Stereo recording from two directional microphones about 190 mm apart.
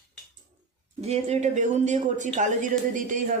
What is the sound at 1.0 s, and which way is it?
Speech, 35° right (ahead or behind).